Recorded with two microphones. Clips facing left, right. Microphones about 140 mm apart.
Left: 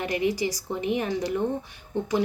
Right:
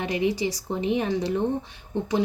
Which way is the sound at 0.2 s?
25° right (ahead or behind).